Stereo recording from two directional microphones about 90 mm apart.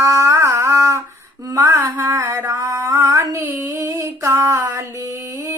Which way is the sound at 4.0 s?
35° right (ahead or behind).